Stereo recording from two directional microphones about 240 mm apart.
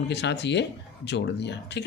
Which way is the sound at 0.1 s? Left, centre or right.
Left.